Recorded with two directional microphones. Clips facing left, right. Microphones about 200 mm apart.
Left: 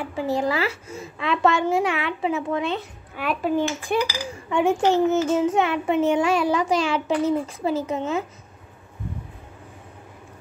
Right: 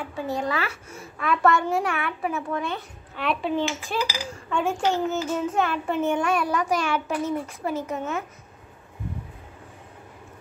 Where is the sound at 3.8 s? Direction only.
15° left (ahead or behind).